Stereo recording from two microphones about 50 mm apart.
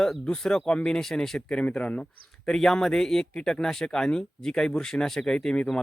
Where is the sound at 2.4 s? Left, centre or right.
Centre.